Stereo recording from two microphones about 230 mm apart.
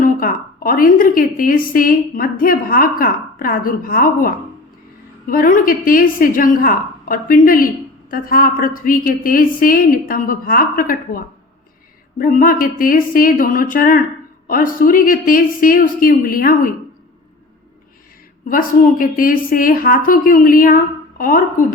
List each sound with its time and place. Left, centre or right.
0.0 s a woman's voice: left
5.3 s a woman's voice: left
12.2 s a woman's voice: left
18.4 s a woman's voice: left